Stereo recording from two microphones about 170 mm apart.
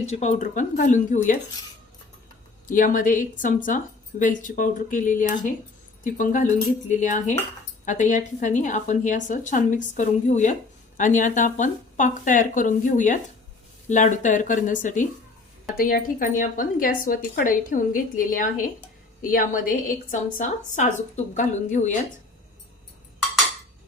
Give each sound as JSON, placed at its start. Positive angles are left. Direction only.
{"t": 0.0, "sound": "a woman's voice", "side_deg": 40}
{"t": 2.6, "sound": "a woman's voice", "side_deg": 50}